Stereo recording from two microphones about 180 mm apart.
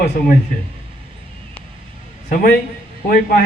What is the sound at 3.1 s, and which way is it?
Speech, 55° left (ahead or behind).